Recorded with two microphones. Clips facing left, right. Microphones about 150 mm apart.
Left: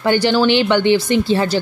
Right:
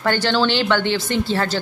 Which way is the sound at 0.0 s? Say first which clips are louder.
Left 4 dB; 15° left (ahead or behind).